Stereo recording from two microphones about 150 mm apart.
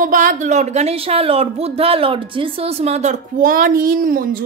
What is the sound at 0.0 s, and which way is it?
A woman's voice, 65° right (ahead or behind).